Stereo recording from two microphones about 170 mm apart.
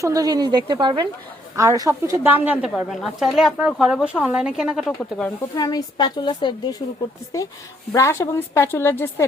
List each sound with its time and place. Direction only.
0.0 s a woman's voice: 20° right (ahead or behind); by 4.9 s 5° right (ahead or behind)
4.9 s a woman's voice: 5° left (ahead or behind)
5.5 s a woman's voice: 20° left (ahead or behind)
7.9 s a woman's voice: 15° left (ahead or behind)